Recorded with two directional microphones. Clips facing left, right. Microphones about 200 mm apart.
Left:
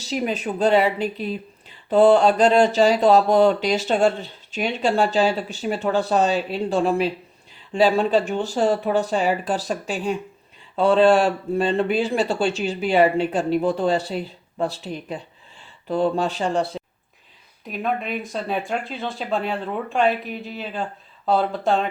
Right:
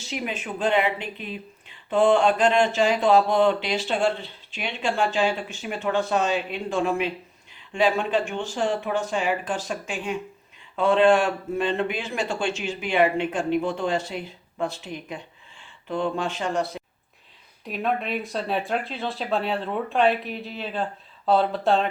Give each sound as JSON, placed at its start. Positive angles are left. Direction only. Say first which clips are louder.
{"t": 0.0, "sound": "speech", "louder": "left 6 dB", "side_deg": 35}
{"t": 17.7, "sound": "speech", "louder": "left 1 dB", "side_deg": 0}